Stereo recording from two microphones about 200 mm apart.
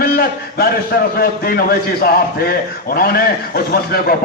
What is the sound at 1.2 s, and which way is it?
A man's voice, 50° left (ahead or behind).